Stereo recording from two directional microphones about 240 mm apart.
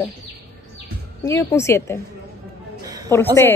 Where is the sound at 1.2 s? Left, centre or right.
Centre.